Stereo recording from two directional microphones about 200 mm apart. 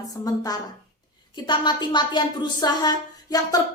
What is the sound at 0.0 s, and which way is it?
A woman's voice, 20° left (ahead or behind).